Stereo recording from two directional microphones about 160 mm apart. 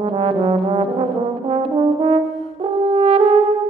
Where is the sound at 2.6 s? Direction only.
35° right (ahead or behind).